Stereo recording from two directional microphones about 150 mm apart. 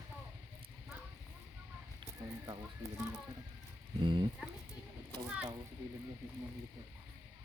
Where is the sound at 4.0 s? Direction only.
30° right (ahead or behind).